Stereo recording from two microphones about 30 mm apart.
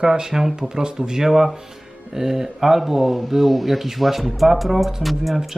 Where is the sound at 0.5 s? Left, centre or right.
Right.